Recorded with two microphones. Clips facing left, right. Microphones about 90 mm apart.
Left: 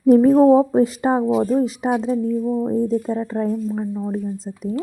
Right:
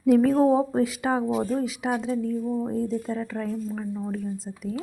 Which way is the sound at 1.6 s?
35° left (ahead or behind).